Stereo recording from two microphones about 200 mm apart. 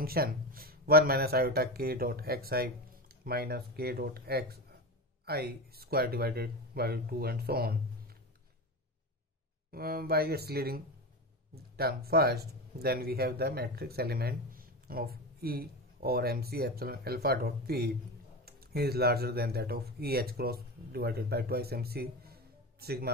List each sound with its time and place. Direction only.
0.0 s speech: 50° right (ahead or behind)
9.7 s speech: 50° right (ahead or behind)